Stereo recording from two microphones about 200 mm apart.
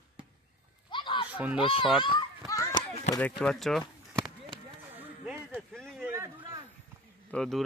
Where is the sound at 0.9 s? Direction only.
25° left (ahead or behind).